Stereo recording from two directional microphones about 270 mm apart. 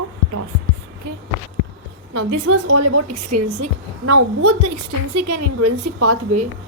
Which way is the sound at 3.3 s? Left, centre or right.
Right.